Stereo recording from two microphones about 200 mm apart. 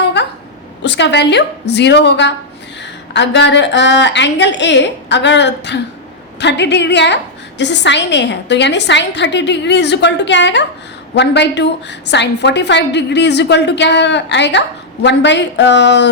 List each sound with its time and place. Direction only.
0.8 s a woman's voice: 60° left (ahead or behind)